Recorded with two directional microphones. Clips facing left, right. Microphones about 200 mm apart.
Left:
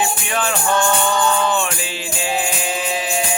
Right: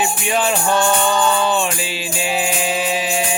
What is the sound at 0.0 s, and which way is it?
Music, 20° right (ahead or behind).